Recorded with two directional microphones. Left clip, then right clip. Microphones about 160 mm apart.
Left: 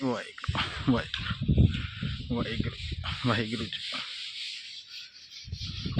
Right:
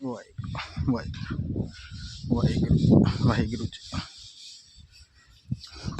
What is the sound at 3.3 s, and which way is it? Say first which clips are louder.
Speech: right 1 dB; 20° right (ahead or behind).